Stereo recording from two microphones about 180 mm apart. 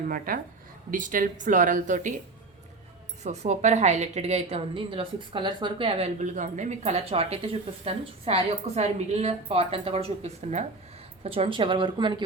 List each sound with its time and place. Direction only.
0.3 s speech: 50° right (ahead or behind)
3.2 s a woman's voice: 40° right (ahead or behind)